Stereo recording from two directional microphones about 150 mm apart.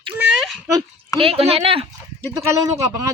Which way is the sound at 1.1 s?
40° right (ahead or behind).